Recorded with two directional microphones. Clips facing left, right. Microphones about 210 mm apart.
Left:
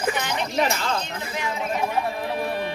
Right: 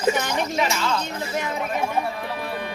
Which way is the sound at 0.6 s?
55° left (ahead or behind).